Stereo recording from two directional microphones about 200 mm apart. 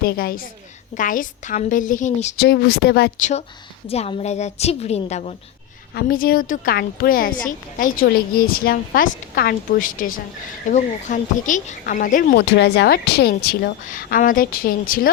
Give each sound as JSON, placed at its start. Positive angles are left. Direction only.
{"t": 0.0, "sound": "a woman's voice", "side_deg": 50}
{"t": 2.4, "sound": "speech", "side_deg": 55}
{"t": 3.2, "sound": "a woman's voice", "side_deg": 35}
{"t": 5.9, "sound": "speech", "side_deg": 50}